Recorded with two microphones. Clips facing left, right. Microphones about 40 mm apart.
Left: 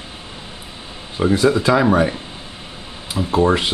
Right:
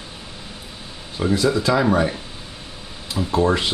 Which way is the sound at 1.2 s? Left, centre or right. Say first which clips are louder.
Left 4 dB; left.